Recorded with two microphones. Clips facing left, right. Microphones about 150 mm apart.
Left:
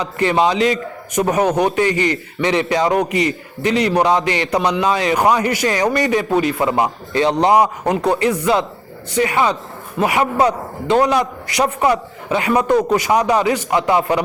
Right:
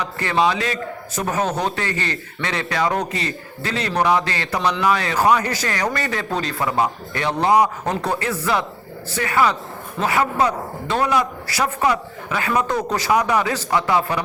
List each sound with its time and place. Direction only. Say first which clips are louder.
0.0 s a man's voice: left 4 dB; 20° left (ahead or behind)